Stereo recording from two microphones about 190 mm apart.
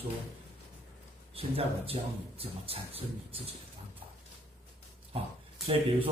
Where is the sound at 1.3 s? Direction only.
30° right (ahead or behind).